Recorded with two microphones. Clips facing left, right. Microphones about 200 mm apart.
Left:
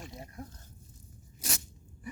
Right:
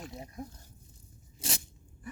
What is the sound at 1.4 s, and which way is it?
Crunch, 30° right (ahead or behind).